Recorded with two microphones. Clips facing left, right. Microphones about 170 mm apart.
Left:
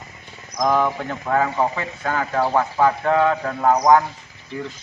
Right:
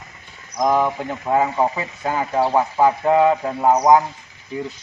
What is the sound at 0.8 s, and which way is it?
Speech, 20° right (ahead or behind).